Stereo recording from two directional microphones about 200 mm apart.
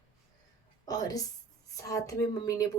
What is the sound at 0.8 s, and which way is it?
A woman's voice, 20° left (ahead or behind).